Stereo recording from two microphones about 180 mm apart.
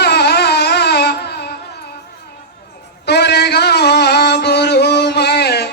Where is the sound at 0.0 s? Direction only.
65° left (ahead or behind).